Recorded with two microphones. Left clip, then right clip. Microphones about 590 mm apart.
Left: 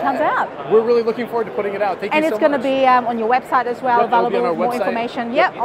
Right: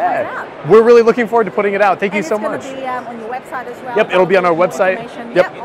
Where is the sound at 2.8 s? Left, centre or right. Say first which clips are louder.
Left 8 dB; left.